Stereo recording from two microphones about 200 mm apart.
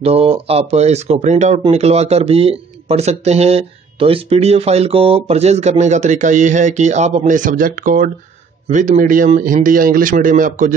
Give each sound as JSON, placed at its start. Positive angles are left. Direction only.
{"t": 0.0, "sound": "speech", "side_deg": -30}